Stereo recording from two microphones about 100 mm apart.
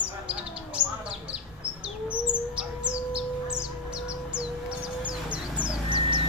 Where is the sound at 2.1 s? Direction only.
10° right (ahead or behind).